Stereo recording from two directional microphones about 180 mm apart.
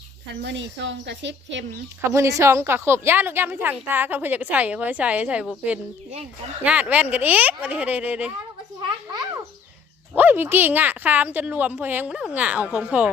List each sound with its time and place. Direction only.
0.4 s speech: 90° right
2.0 s a woman's voice: 15° right (ahead or behind)
10.2 s a woman's voice: 10° right (ahead or behind)